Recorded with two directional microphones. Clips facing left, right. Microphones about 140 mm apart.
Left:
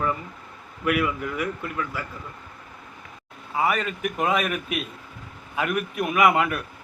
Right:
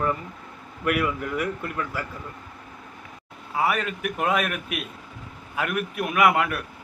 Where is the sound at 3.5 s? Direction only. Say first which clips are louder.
Even; 5° right (ahead or behind).